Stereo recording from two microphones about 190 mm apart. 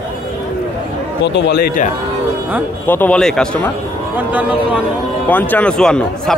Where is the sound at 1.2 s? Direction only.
65° left (ahead or behind).